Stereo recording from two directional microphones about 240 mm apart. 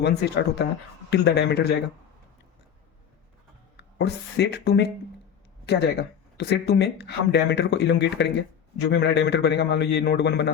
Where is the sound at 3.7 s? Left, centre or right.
Left.